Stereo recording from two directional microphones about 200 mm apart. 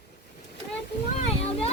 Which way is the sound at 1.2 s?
30° left (ahead or behind).